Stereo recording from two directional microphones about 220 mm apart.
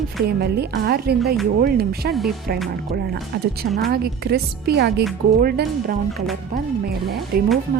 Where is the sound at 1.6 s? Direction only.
45° right (ahead or behind).